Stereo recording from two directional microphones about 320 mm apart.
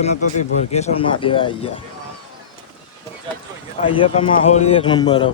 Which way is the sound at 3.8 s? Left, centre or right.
Centre.